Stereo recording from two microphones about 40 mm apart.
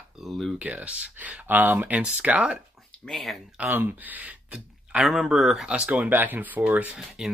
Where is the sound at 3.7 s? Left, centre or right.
Right.